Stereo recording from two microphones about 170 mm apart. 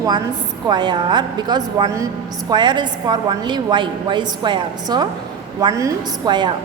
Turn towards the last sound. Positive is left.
turn(degrees=-25)  # may be behind; listen again after turning